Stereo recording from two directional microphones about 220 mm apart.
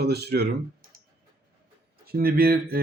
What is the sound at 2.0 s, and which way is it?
Speech, 45° right (ahead or behind).